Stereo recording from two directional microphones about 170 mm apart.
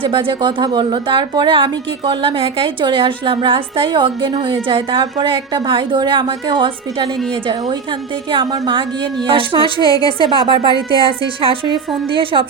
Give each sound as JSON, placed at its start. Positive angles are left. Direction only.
{"t": 0.0, "sound": "a woman's voice", "side_deg": -30}
{"t": 9.8, "sound": "a woman's voice", "side_deg": 20}
{"t": 10.2, "sound": "a woman's voice", "side_deg": -30}